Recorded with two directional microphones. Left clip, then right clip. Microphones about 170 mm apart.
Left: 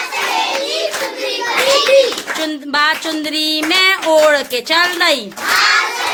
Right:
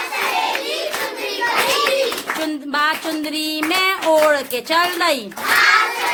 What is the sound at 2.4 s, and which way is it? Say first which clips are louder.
A woman's voice: left 5 dB; centre (ahead or behind).